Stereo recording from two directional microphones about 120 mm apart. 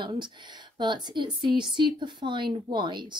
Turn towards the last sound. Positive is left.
turn(degrees=-40)  # may be behind; listen again after turning